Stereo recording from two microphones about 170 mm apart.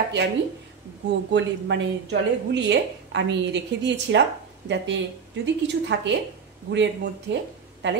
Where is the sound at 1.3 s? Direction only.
90° right.